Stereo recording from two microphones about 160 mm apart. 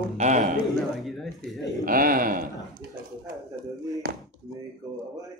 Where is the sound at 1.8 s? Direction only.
60° right (ahead or behind).